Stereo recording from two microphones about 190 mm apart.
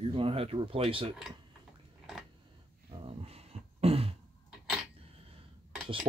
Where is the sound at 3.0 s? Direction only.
30° right (ahead or behind).